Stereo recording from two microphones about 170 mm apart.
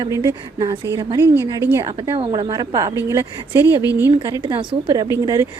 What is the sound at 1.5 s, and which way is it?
Speech, 15° right (ahead or behind).